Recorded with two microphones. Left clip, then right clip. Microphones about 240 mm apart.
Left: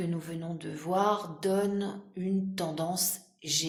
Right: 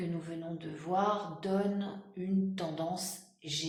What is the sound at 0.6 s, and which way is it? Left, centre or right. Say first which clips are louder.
Speech: left 4 dB; left.